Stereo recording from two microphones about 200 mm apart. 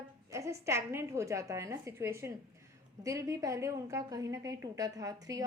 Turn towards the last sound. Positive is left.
turn(degrees=-15)  # may be behind; listen again after turning